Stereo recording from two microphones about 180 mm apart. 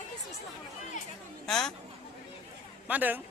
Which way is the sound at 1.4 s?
5° left (ahead or behind).